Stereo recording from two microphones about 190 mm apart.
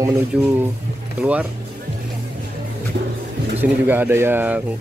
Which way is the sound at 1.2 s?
5° right (ahead or behind).